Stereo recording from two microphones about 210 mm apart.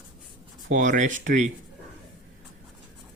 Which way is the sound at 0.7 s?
35° right (ahead or behind).